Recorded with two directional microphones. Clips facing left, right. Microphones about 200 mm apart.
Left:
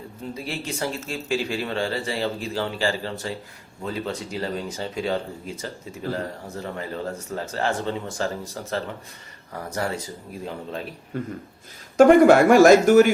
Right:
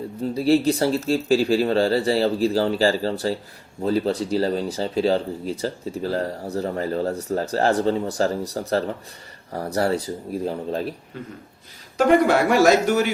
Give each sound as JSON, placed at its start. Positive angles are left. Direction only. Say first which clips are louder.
{"t": 0.3, "sound": "speech", "louder": "right 14 dB", "side_deg": -35}
{"t": 11.1, "sound": "a man's voice", "louder": "left 5 dB", "side_deg": 50}